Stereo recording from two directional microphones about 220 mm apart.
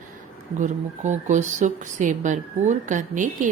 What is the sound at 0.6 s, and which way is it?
A woman's voice, 35° right (ahead or behind).